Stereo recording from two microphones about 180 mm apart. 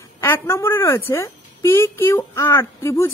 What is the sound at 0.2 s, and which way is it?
Speech, 15° left (ahead or behind).